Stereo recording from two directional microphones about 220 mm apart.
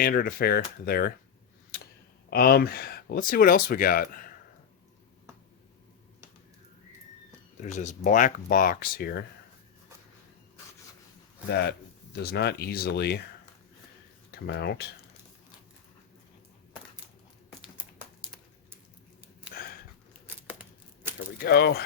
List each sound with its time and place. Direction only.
0.0 s speech: 45° left (ahead or behind)
2.3 s speech: 45° left (ahead or behind)
7.6 s speech: 35° left (ahead or behind)
11.4 s speech: 50° left (ahead or behind)
14.3 s speech: 50° left (ahead or behind)
20.5 s a sound: 5° right (ahead or behind)
21.3 s speech: 45° left (ahead or behind)